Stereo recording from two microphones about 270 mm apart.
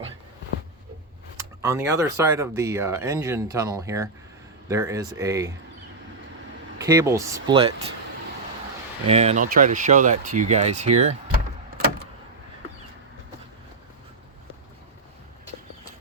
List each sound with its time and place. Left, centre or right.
1.4 s speech: centre
6.7 s speech: centre
9.0 s speech: right